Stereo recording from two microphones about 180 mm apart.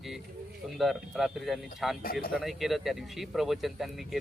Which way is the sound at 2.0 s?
55° left (ahead or behind).